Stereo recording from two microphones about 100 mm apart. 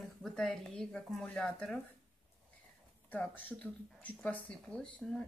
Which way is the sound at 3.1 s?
15° left (ahead or behind).